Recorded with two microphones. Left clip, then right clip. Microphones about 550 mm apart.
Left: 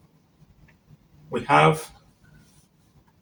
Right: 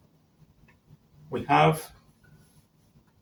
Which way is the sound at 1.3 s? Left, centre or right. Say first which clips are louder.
Left 4 dB; right.